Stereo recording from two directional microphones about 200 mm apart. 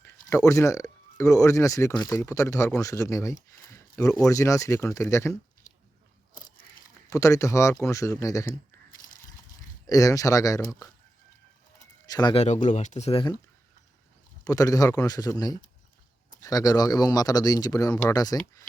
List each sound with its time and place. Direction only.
0.0 s speech: 15° left (ahead or behind)
3.7 s a sound: 15° left (ahead or behind)
4.2 s speech: 15° left (ahead or behind)
7.1 s speech: 15° left (ahead or behind)
9.9 s speech: 15° left (ahead or behind)
12.0 s speech: 20° left (ahead or behind)
14.4 s speech: 15° left (ahead or behind)